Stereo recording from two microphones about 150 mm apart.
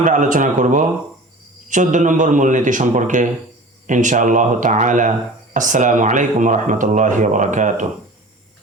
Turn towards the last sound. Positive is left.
turn(degrees=-55)  # may be behind; listen again after turning